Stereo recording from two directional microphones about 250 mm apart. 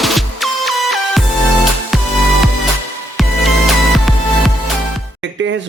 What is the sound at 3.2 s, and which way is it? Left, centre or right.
Music, centre.